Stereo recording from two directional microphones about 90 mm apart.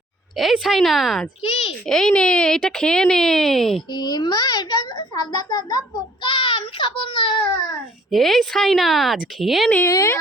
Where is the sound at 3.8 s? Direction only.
50° left (ahead or behind).